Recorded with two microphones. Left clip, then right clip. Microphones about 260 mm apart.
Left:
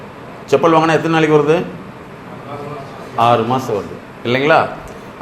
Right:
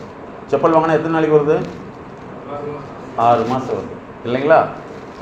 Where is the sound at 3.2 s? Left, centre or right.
Left.